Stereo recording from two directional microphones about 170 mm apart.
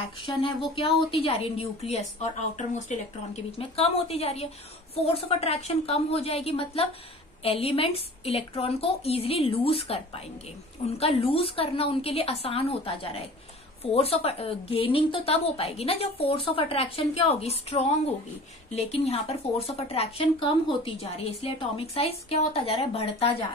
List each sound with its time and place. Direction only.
0.4 s a woman's voice: 30° left (ahead or behind)